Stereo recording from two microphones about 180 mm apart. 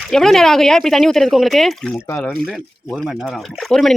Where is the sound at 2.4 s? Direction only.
Centre (ahead or behind).